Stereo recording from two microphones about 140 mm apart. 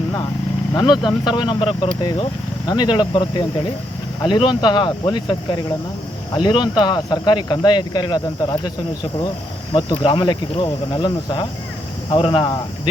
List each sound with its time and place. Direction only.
1.2 s speech: 35° left (ahead or behind)
9.7 s speech: 35° left (ahead or behind)